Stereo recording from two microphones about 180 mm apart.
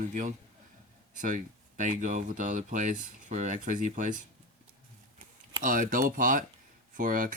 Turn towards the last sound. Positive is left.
turn(degrees=-50)  # may be behind; listen again after turning